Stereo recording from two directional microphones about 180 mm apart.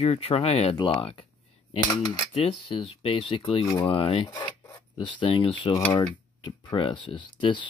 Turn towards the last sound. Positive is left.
turn(degrees=25)  # may be behind; listen again after turning